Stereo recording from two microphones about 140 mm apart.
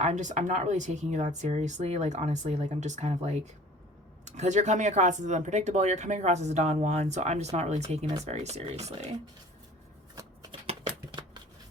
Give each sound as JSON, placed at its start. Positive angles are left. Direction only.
{"t": 0.0, "sound": "speech", "side_deg": -60}